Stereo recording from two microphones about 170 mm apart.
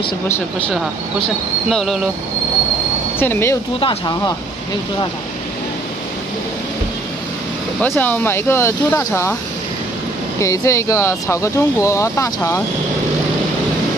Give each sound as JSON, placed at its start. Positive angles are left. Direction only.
{"t": 1.7, "sound": "speech", "side_deg": 0}
{"t": 3.2, "sound": "speech", "side_deg": 15}
{"t": 3.8, "sound": "speech", "side_deg": 25}
{"t": 7.8, "sound": "speech", "side_deg": 10}
{"t": 10.4, "sound": "speech", "side_deg": 20}